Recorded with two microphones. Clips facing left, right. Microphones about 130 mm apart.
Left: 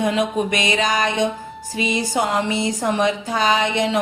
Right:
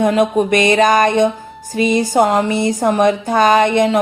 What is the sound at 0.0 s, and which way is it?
Speech, 50° right (ahead or behind).